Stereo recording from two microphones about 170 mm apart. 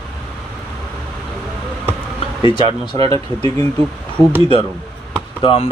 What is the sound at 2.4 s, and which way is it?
Speech, 25° left (ahead or behind).